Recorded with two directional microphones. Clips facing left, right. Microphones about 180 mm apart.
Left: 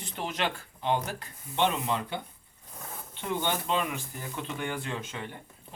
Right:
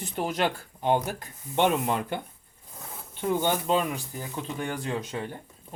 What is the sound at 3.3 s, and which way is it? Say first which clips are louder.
Speech: right 4 dB; 40° right (ahead or behind).